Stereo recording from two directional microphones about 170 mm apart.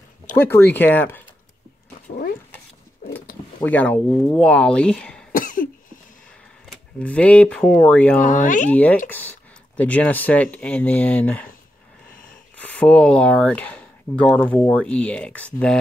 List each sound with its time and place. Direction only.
0.4 s speech: 10° left (ahead or behind)
3.6 s speech: 10° left (ahead or behind)
5.3 s cough: 50° left (ahead or behind)
7.0 s speech: 5° left (ahead or behind)
8.2 s speech: 50° left (ahead or behind)
8.6 s speech: 10° left (ahead or behind)
12.5 s speech: 10° left (ahead or behind)